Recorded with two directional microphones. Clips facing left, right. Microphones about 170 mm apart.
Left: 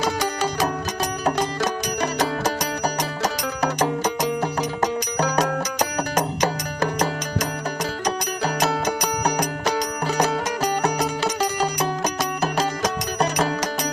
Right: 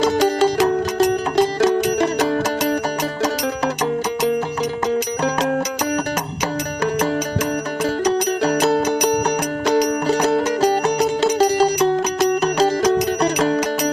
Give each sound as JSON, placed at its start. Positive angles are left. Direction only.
{"t": 0.9, "sound": "music", "side_deg": -25}
{"t": 8.4, "sound": "music", "side_deg": -35}
{"t": 10.2, "sound": "music", "side_deg": -30}